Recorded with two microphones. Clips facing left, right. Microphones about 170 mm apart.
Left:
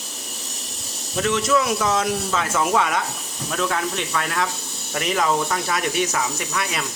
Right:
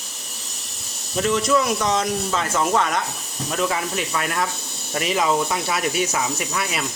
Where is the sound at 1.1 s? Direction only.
Centre (ahead or behind).